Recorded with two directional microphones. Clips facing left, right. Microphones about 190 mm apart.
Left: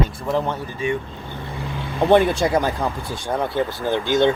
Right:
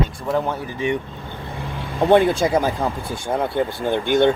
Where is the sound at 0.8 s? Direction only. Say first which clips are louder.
Right 1 dB; 20° right (ahead or behind).